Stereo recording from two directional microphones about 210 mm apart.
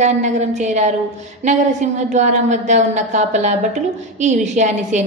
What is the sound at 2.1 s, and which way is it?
A woman's voice, 35° right (ahead or behind).